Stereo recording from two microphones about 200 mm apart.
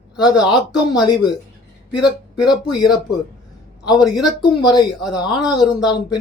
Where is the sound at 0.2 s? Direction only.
20° left (ahead or behind).